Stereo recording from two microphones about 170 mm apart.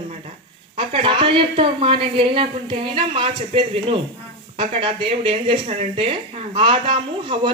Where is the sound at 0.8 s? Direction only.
30° right (ahead or behind).